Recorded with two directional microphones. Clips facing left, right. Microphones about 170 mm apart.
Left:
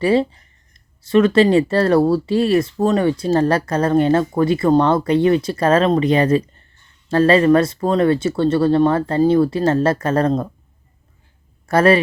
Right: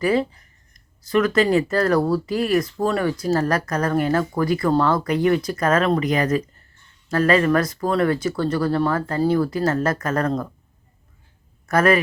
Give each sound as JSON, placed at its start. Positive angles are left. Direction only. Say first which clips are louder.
{"t": 0.0, "sound": "speech", "louder": "left 4 dB", "side_deg": 30}
{"t": 11.6, "sound": "speech", "louder": "left 4 dB", "side_deg": 30}